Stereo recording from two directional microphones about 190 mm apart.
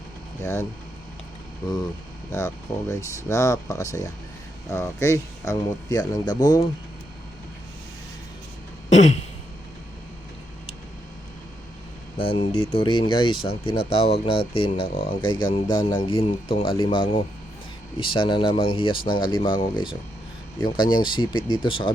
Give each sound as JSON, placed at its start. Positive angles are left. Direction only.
{"t": 1.6, "sound": "speech", "side_deg": 20}
{"t": 2.9, "sound": "speech", "side_deg": 15}
{"t": 8.9, "sound": "throat clearing", "side_deg": 35}
{"t": 12.1, "sound": "speech", "side_deg": 30}